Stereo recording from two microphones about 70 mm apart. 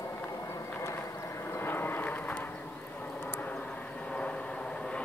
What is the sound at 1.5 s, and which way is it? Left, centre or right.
Vehicle, left.